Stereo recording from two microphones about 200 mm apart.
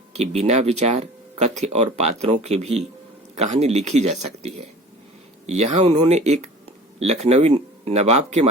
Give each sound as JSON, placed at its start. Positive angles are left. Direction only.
{"t": 0.1, "sound": "speech", "side_deg": -35}